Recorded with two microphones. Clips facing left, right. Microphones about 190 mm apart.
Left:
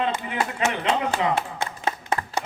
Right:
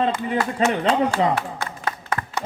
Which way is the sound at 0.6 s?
35° right (ahead or behind).